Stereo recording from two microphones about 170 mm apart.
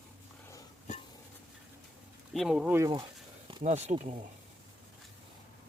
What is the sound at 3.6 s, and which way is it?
Speech, 45° right (ahead or behind).